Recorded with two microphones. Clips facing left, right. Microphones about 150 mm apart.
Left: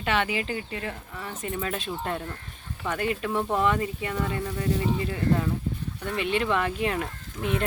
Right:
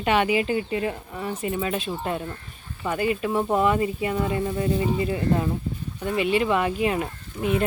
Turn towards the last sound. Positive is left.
turn(degrees=-5)  # may be behind; listen again after turning